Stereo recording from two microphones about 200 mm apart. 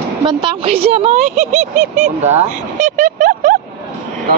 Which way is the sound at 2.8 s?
40° right (ahead or behind).